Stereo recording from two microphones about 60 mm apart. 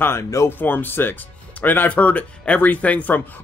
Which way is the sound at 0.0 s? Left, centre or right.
Left.